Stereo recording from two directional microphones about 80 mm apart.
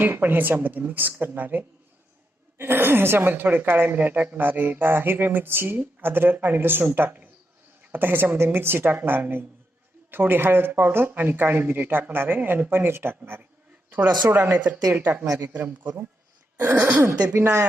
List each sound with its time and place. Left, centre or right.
0.0 s speech: right
17.2 s speech: centre
17.4 s speech: right